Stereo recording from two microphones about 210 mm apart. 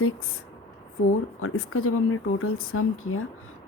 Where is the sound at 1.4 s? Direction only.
80° left.